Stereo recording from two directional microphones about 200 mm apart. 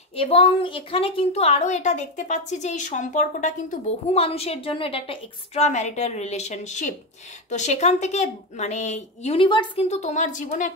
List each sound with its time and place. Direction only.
0.1 s a woman's voice: 30° left (ahead or behind)
9.8 s a woman's voice: 35° left (ahead or behind)